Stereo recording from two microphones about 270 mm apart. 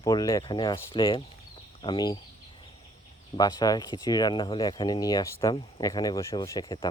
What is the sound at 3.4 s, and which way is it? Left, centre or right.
Speech, centre.